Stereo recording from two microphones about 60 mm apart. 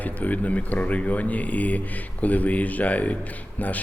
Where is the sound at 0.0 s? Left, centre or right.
Left.